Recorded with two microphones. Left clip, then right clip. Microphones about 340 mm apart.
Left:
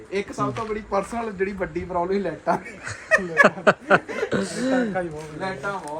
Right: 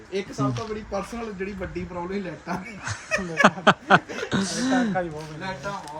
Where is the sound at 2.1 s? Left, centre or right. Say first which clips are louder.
Left 8 dB; centre.